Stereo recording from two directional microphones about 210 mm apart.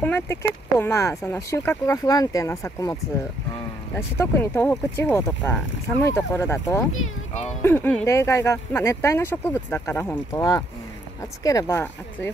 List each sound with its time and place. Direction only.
0.0 s speech: 10° left (ahead or behind)